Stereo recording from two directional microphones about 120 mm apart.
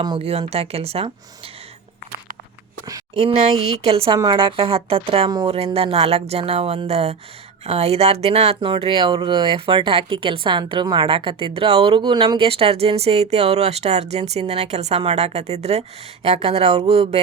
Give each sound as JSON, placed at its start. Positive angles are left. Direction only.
{"t": 0.2, "sound": "speech", "side_deg": -55}
{"t": 3.2, "sound": "speech", "side_deg": -65}
{"t": 3.8, "sound": "speech", "side_deg": -55}